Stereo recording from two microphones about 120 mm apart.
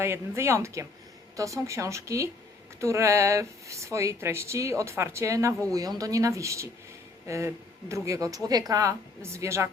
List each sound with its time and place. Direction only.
0.0 s a woman's voice: 20° right (ahead or behind)